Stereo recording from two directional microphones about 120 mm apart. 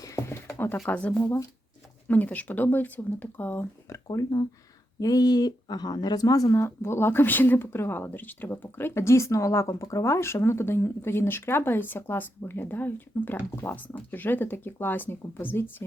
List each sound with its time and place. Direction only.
0.2 s a sound: 20° left (ahead or behind)
0.9 s speech: 10° left (ahead or behind)
4.1 s speech: 30° left (ahead or behind); by 15.7 s 15° left (ahead or behind)